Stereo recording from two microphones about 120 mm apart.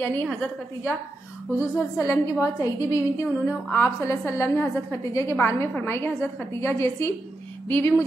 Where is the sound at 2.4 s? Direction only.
25° left (ahead or behind).